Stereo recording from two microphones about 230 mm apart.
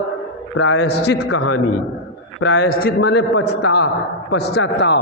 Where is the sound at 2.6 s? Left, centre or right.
Left.